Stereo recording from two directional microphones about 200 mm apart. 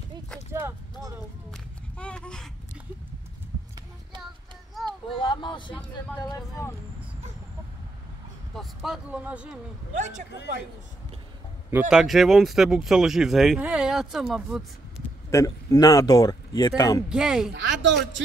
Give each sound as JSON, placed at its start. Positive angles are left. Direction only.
{"t": 0.5, "sound": "a sound", "side_deg": -10}
{"t": 1.5, "sound": "a sound", "side_deg": 5}
{"t": 5.1, "sound": "a sound", "side_deg": 25}
{"t": 6.1, "sound": "speech", "side_deg": 20}
{"t": 8.5, "sound": "speech", "side_deg": 0}
{"t": 9.9, "sound": "speech", "side_deg": -35}
{"t": 11.9, "sound": "speech", "side_deg": 0}
{"t": 15.3, "sound": "speech", "side_deg": 20}
{"t": 17.1, "sound": "speech", "side_deg": -5}